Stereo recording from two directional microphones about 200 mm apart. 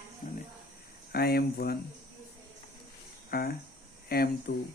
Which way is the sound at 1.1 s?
50° left (ahead or behind).